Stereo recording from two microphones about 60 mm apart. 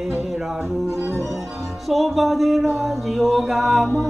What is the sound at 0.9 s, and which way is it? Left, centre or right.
Music, right.